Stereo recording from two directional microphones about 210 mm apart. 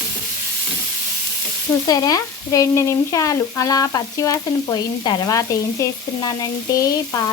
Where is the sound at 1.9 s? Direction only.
15° left (ahead or behind).